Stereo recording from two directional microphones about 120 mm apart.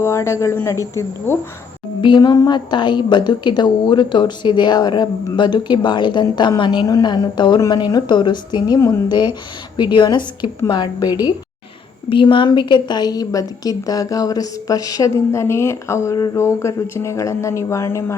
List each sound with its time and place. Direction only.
0.0 s a woman's voice: 20° left (ahead or behind)
2.0 s a woman's voice: 40° left (ahead or behind); by 18.0 s 25° left (ahead or behind)